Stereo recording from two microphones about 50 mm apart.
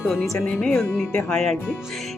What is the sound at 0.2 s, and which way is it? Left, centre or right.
Speech, left.